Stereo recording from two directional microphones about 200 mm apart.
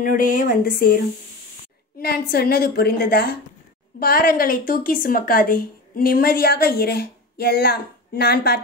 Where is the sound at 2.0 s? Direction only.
50° left (ahead or behind).